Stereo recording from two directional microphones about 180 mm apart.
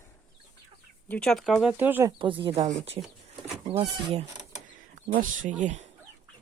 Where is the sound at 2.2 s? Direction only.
30° right (ahead or behind).